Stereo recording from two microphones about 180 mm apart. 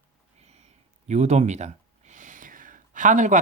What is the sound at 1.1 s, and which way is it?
Speech, 40° right (ahead or behind).